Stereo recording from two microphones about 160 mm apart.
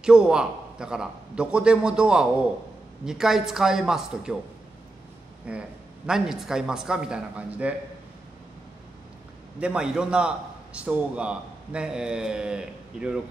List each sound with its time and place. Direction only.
0.0 s a man's voice: 5° right (ahead or behind)
5.5 s a man's voice: 5° right (ahead or behind)
9.6 s a man's voice: 5° right (ahead or behind)